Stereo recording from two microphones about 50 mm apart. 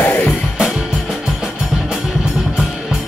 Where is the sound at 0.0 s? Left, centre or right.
Left.